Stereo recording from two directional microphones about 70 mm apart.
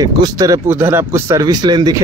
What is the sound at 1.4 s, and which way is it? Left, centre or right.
Speech, right.